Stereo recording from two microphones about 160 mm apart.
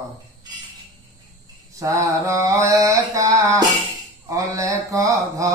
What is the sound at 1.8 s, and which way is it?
Mantra, 20° right (ahead or behind).